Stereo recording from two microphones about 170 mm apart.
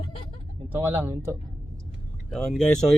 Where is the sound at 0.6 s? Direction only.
10° right (ahead or behind).